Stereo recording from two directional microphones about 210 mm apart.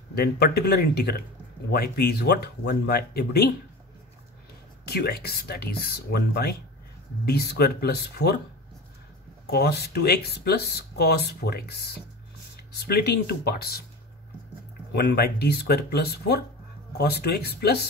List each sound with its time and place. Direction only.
0.1 s speech: 50° left (ahead or behind)
4.8 s speech: 50° left (ahead or behind)
9.5 s speech: 50° left (ahead or behind)
15.0 s speech: 50° left (ahead or behind)